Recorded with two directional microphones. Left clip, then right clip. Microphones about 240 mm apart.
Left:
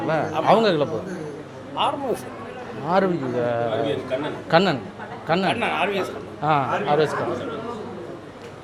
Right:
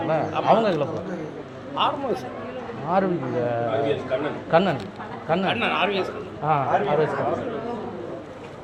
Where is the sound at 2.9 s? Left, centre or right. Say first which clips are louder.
Left 2 dB; left.